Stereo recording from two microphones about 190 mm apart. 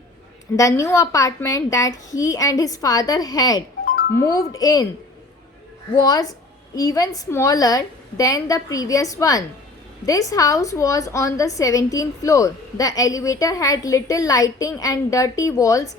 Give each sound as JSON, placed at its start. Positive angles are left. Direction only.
{"t": 0.5, "sound": "a woman's voice", "side_deg": 15}
{"t": 6.0, "sound": "a woman's voice", "side_deg": 20}